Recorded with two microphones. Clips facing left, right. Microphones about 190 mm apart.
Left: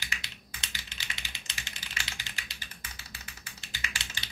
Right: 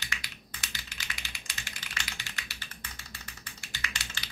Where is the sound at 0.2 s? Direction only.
25° left (ahead or behind).